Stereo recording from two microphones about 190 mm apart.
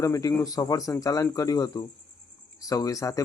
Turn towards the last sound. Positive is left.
turn(degrees=15)  # may be behind; listen again after turning